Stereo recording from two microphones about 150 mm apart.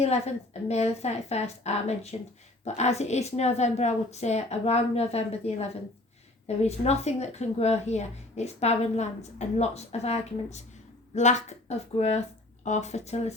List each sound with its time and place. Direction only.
0.0 s a woman's voice: 45° left (ahead or behind)